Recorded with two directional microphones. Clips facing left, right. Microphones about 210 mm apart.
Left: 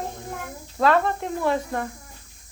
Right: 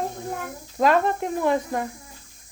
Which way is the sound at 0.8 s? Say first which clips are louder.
Right 1 dB; 15° right (ahead or behind).